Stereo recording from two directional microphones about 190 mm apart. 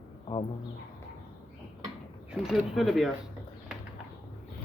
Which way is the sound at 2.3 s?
5° right (ahead or behind).